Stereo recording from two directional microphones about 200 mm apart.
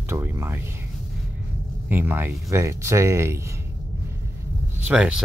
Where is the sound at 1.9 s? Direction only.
10° right (ahead or behind).